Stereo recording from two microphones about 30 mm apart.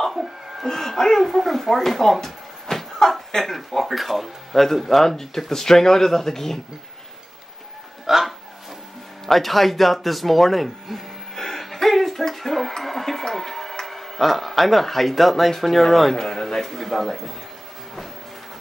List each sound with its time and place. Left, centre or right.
0.2 s a sound: centre
0.7 s speech: centre
1.2 s speech: centre
2.2 s a sound: centre
3.4 s speech: centre
4.8 s a man's voice: centre
8.1 s speech: centre
9.2 s speech: centre
10.9 s speech: centre
11.3 s a sound: centre
13.8 s a man's voice: centre
16.2 s a man's voice: centre